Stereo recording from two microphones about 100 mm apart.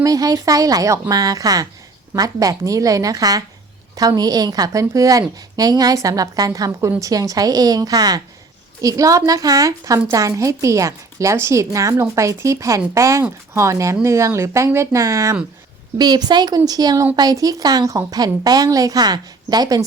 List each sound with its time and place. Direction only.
0.0 s a woman's voice: 35° right (ahead or behind)
16.0 s a woman's voice: 45° right (ahead or behind)